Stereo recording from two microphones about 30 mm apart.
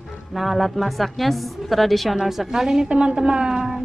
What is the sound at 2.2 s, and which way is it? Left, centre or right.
Speech, centre.